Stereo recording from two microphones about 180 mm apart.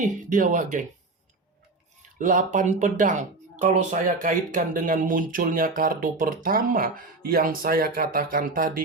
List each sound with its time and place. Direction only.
0.3 s speech: 45° right (ahead or behind)
2.0 s speech: 45° right (ahead or behind)